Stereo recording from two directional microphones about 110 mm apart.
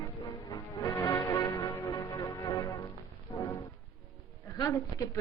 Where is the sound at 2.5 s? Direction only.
35° left (ahead or behind).